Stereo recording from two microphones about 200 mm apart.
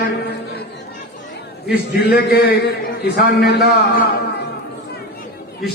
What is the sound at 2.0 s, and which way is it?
A man's voice, 50° left (ahead or behind).